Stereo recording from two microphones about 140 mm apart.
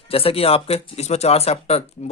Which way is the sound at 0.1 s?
45° left (ahead or behind).